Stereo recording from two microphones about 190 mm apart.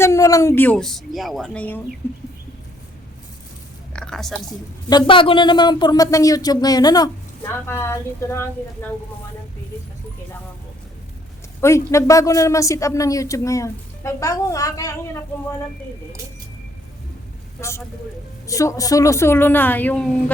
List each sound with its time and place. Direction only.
0.0 s speech: 15° left (ahead or behind)
3.9 s speech: 5° left (ahead or behind)
4.9 s speech: 25° left (ahead or behind)
11.6 s speech: 15° left (ahead or behind)
17.6 s speech: 15° left (ahead or behind)